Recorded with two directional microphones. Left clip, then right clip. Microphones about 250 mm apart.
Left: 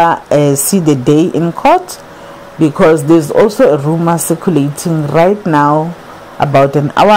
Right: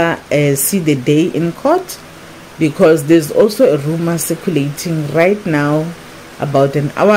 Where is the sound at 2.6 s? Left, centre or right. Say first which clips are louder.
Left 2 dB; centre.